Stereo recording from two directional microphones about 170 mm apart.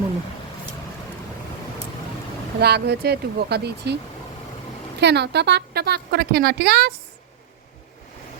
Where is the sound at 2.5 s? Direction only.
70° right (ahead or behind).